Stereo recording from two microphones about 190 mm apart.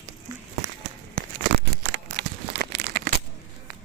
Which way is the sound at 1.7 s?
55° right (ahead or behind).